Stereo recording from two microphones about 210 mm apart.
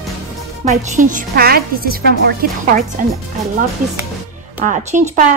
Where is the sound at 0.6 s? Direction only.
35° right (ahead or behind).